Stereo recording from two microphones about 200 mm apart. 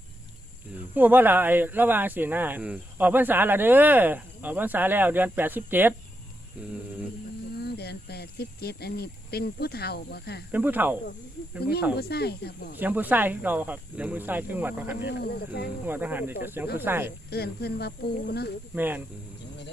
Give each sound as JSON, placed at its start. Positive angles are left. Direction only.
{"t": 0.9, "sound": "speech", "side_deg": -10}
{"t": 7.6, "sound": "speech", "side_deg": 55}
{"t": 10.5, "sound": "speech", "side_deg": -10}
{"t": 11.9, "sound": "speech", "side_deg": 55}
{"t": 12.8, "sound": "speech", "side_deg": -10}
{"t": 15.0, "sound": "speech", "side_deg": 55}
{"t": 15.9, "sound": "speech", "side_deg": -10}
{"t": 17.2, "sound": "speech", "side_deg": 50}
{"t": 18.7, "sound": "speech", "side_deg": -10}